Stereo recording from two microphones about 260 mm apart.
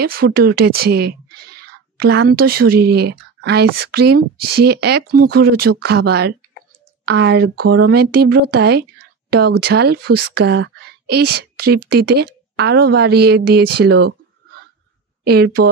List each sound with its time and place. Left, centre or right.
0.0 s a woman's voice: right
15.2 s a woman's voice: right